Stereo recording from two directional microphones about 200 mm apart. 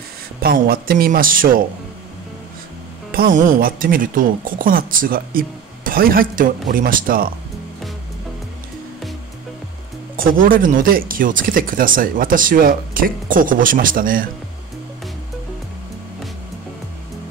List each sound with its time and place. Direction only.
0.4 s a woman's voice: 45° right (ahead or behind)
3.1 s a woman's voice: 45° right (ahead or behind)
10.1 s a woman's voice: 45° right (ahead or behind)